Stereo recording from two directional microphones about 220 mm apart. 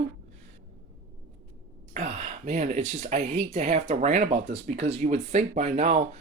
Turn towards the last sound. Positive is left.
turn(degrees=-30)  # may be behind; listen again after turning